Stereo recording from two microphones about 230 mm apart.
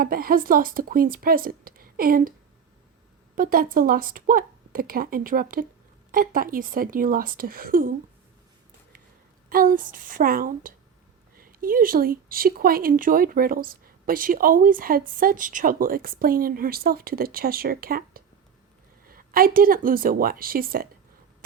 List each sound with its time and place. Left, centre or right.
0.0 s speech: right
3.3 s speech: right
9.5 s speech: right